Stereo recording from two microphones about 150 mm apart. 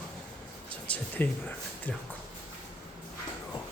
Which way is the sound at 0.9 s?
10° left (ahead or behind).